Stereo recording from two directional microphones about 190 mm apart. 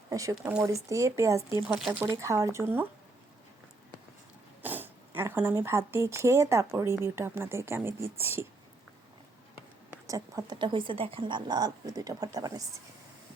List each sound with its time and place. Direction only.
0.1 s speech: 15° right (ahead or behind)
4.6 s speech: 10° right (ahead or behind)
10.1 s speech: 20° right (ahead or behind)